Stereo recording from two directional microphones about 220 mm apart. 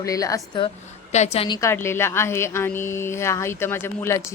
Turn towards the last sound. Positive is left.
turn(degrees=10)  # may be behind; listen again after turning